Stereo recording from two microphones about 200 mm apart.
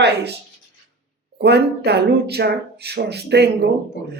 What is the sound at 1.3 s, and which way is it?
Speech, 55° right (ahead or behind).